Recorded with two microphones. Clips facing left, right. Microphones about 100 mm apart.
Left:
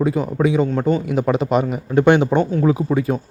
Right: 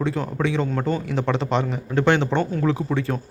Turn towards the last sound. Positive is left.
turn(degrees=10)  # may be behind; listen again after turning